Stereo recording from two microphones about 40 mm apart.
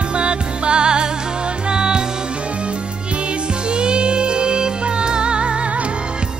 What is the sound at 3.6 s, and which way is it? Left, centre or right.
Music, right.